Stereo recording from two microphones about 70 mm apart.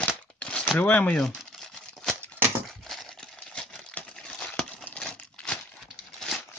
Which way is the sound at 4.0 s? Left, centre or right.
Left.